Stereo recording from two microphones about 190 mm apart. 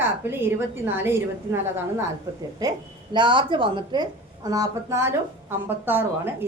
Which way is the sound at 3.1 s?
25° right (ahead or behind).